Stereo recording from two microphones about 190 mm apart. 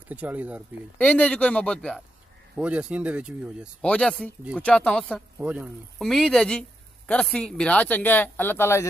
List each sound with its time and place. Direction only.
0.1 s speech: 10° right (ahead or behind)
0.9 s speech: 5° left (ahead or behind)
2.5 s speech: 5° right (ahead or behind)
3.8 s speech: 5° left (ahead or behind)
5.4 s speech: 5° right (ahead or behind); by 8.8 s 10° left (ahead or behind)